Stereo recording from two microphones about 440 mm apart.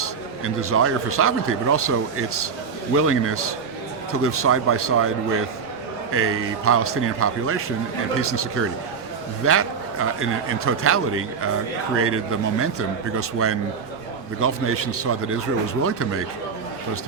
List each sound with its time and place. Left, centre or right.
0.0 s a man's voice: right